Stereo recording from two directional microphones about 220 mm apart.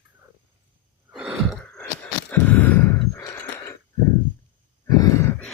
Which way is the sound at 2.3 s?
10° left (ahead or behind).